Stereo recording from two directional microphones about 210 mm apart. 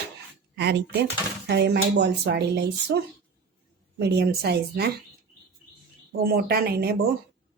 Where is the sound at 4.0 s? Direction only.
50° right (ahead or behind).